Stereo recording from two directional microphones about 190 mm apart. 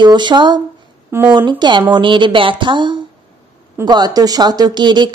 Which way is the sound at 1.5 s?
25° right (ahead or behind).